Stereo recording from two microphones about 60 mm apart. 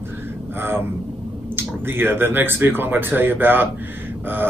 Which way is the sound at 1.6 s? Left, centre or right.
Right.